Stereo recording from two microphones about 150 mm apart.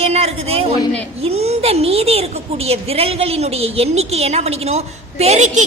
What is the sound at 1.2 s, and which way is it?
A woman's voice, 45° right (ahead or behind).